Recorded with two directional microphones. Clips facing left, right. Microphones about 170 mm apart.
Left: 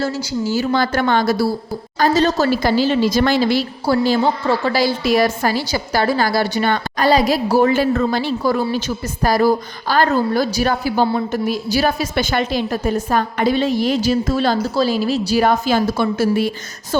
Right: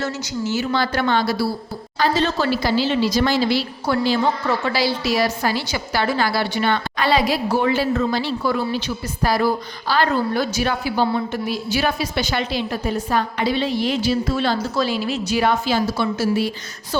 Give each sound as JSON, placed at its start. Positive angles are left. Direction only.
{"t": 0.0, "sound": "a woman's voice", "side_deg": 35}